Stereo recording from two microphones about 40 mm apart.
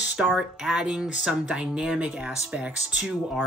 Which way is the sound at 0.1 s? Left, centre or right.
Right.